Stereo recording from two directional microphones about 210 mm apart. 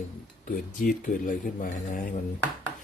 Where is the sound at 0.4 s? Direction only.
40° left (ahead or behind).